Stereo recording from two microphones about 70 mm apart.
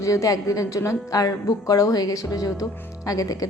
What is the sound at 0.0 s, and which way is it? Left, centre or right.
A woman's voice, left.